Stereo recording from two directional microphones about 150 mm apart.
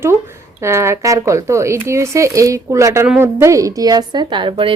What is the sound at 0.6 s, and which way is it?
A woman's voice, 20° right (ahead or behind).